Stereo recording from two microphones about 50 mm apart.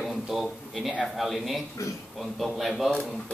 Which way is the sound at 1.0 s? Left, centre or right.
Centre.